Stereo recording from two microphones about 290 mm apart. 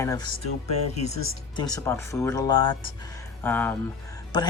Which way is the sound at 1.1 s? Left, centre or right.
Left.